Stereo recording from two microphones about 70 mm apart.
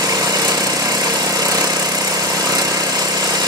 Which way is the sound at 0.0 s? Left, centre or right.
Right.